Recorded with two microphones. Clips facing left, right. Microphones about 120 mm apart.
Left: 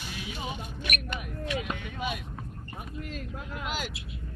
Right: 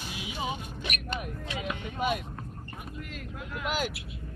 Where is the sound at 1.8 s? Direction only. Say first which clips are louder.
Right 4 dB; 40° right (ahead or behind).